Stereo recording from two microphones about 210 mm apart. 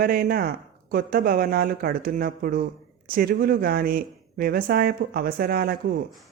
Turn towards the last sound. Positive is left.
turn(degrees=-45)  # may be behind; listen again after turning